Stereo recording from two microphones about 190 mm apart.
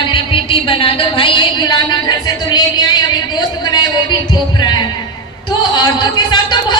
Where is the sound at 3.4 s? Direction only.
25° left (ahead or behind).